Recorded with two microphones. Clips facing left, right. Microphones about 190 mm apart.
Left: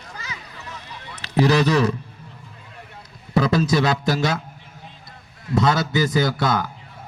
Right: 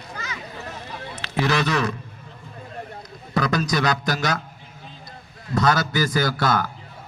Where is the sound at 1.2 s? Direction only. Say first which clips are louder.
Left 5 dB; 35° left (ahead or behind).